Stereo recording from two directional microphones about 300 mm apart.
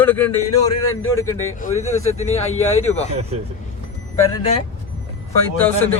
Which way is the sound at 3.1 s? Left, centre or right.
Right.